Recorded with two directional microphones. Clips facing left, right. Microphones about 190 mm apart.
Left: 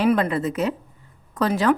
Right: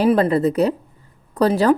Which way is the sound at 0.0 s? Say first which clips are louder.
Right 4 dB; 35° right (ahead or behind).